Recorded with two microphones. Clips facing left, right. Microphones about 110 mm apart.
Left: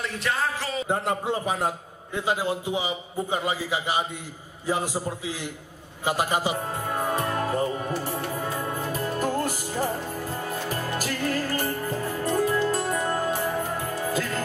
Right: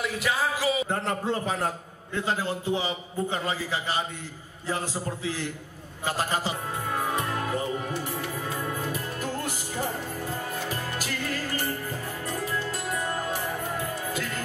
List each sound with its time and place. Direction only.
0.0 s speech: 5° right (ahead or behind)
0.8 s a man's voice: 15° left (ahead or behind)
7.3 s music: 35° left (ahead or behind)
11.0 s music: 45° left (ahead or behind)